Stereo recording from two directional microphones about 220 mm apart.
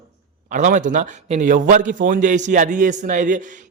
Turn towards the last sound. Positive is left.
turn(degrees=-35)  # may be behind; listen again after turning